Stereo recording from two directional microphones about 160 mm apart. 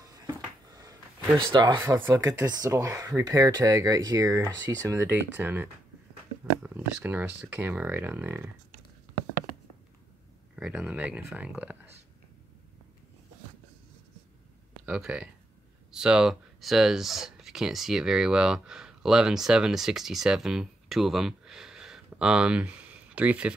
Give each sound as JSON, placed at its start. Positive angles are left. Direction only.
{"t": 0.0, "sound": "a sound", "side_deg": -25}
{"t": 1.4, "sound": "speech", "side_deg": -25}
{"t": 10.5, "sound": "speech", "side_deg": -5}
{"t": 14.9, "sound": "speech", "side_deg": -5}